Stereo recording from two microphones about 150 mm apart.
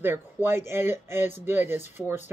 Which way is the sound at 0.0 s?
15° right (ahead or behind).